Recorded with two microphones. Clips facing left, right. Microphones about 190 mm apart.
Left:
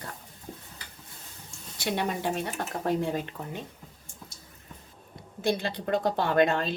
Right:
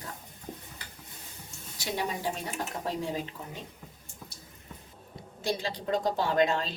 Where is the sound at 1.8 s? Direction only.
65° left (ahead or behind).